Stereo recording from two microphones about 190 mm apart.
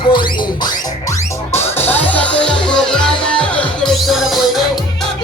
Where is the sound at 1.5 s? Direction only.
10° left (ahead or behind).